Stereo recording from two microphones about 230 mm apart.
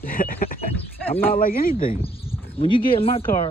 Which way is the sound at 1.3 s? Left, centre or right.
Left.